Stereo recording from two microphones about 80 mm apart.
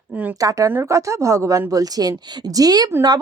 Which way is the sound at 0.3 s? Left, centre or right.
Right.